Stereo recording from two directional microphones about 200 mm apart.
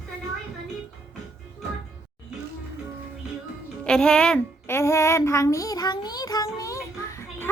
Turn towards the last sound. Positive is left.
turn(degrees=15)  # may be behind; listen again after turning